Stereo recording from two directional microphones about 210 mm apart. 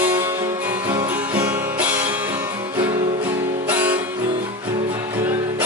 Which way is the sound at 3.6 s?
5° right (ahead or behind).